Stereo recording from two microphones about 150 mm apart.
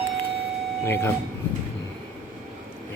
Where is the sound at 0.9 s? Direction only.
15° left (ahead or behind).